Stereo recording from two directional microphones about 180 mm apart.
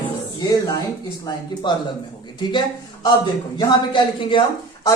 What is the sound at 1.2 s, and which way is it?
A woman's voice, 20° left (ahead or behind).